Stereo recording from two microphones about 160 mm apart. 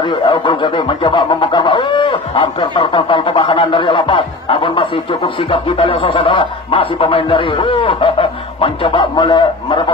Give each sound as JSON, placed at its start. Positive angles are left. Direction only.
{"t": 0.0, "sound": "speech", "side_deg": 30}